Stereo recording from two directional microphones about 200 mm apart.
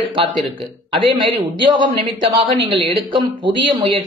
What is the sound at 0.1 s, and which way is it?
Speech, 25° right (ahead or behind).